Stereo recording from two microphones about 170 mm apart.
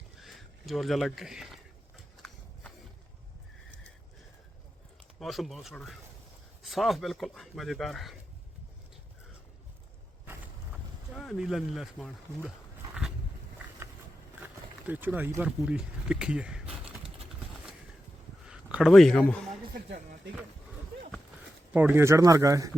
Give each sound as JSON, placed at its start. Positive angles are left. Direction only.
{"t": 0.2, "sound": "speech", "side_deg": 0}
{"t": 5.2, "sound": "speech", "side_deg": 0}
{"t": 10.2, "sound": "vehicle", "side_deg": -10}
{"t": 11.1, "sound": "speech", "side_deg": 0}
{"t": 12.5, "sound": "a sound", "side_deg": -5}
{"t": 14.8, "sound": "speech", "side_deg": -10}
{"t": 18.4, "sound": "a man's voice", "side_deg": -5}
{"t": 19.7, "sound": "speech", "side_deg": -65}
{"t": 21.7, "sound": "speech", "side_deg": -10}